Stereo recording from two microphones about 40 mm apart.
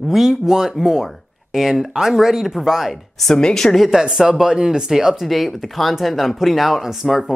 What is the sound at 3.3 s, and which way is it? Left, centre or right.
Speech, centre.